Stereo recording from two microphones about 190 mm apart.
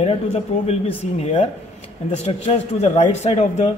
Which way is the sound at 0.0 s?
30° left (ahead or behind).